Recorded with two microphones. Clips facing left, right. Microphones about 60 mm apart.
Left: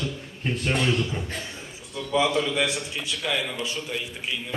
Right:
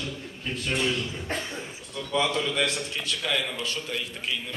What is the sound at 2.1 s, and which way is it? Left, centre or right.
A man's voice, centre.